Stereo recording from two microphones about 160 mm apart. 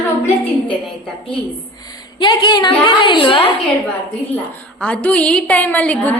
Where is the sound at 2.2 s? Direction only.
30° left (ahead or behind).